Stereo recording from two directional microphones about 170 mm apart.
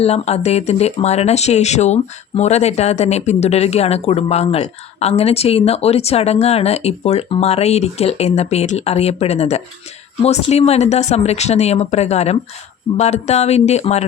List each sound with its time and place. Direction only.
0.0 s speech: 35° left (ahead or behind)